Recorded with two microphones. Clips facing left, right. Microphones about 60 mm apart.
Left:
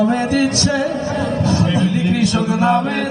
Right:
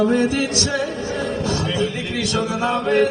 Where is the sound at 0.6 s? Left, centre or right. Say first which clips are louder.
Left 5 dB; left.